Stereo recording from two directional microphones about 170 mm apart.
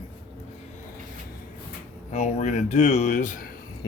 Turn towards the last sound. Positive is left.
turn(degrees=55)  # may be behind; listen again after turning